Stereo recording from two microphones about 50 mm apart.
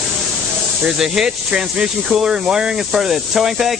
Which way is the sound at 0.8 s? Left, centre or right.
Centre.